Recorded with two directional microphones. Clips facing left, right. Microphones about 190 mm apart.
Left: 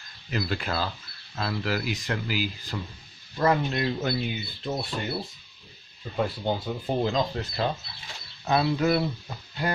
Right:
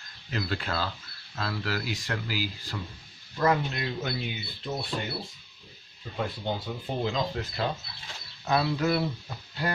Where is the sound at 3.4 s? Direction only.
30° left (ahead or behind).